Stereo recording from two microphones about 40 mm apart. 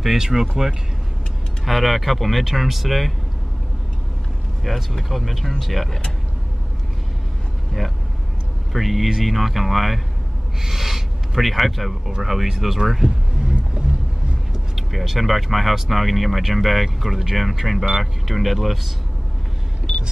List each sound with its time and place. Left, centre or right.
0.0 s speech: centre
1.6 s speech: centre
4.6 s speech: centre
8.7 s speech: centre
13.4 s music: right
14.5 s speech: centre